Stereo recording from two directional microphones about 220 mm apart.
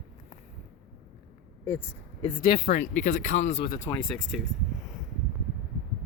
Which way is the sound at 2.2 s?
30° left (ahead or behind).